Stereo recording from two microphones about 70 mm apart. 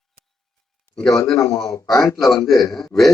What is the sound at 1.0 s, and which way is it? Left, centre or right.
Speech, left.